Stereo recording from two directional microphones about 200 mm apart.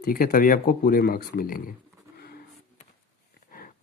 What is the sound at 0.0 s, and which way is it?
Speech, 45° left (ahead or behind).